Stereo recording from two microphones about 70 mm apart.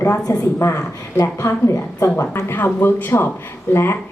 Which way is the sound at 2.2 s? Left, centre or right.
Left.